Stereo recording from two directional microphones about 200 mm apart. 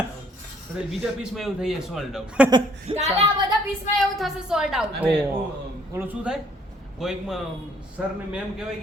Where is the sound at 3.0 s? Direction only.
35° right (ahead or behind).